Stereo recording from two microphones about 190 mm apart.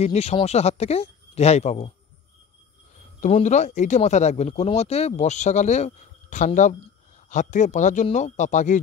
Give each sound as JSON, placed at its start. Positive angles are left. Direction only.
{"t": 0.0, "sound": "speech", "side_deg": 35}
{"t": 3.2, "sound": "speech", "side_deg": 40}